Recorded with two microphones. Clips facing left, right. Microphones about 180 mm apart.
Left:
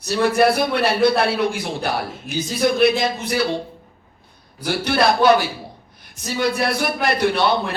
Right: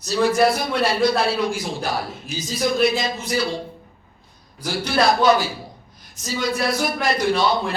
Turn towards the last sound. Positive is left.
turn(degrees=60)  # may be behind; listen again after turning